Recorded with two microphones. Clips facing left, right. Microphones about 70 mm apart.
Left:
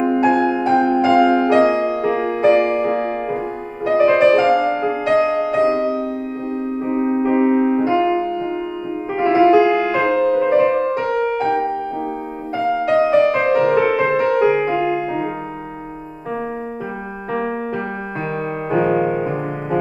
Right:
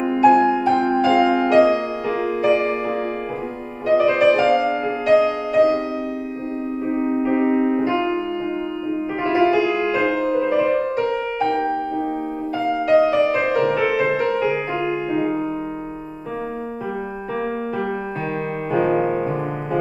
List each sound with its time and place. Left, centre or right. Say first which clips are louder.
0.0 s music: right 1 dB; left
7.1 s music: left 3 dB; left
7.5 s piano: left 3 dB; left
9.2 s music: left 6 dB; left
11.1 s music: left 3 dB; left
12.8 s music: left 1 dB; left
14.8 s music: left 2 dB; centre
18.7 s music: left 2 dB; left
19.0 s music: left 1 dB; centre